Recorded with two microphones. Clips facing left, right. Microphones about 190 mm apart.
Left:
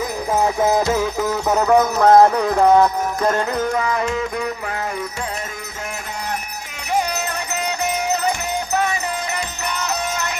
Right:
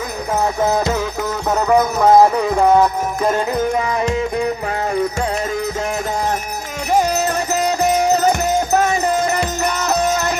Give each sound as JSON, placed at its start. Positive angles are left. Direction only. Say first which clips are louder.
{"t": 1.5, "sound": "music", "louder": "right 1 dB", "side_deg": 5}
{"t": 4.0, "sound": "music", "louder": "right 4 dB", "side_deg": -30}
{"t": 6.9, "sound": "music", "louder": "right 5 dB", "side_deg": -40}